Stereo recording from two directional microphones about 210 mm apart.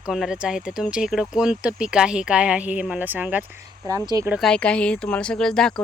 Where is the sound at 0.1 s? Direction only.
Centre (ahead or behind).